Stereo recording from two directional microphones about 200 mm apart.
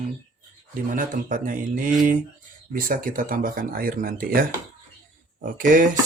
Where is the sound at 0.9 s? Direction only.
45° right (ahead or behind).